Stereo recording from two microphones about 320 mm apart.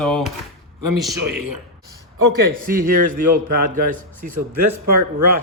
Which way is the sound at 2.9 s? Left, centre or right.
Right.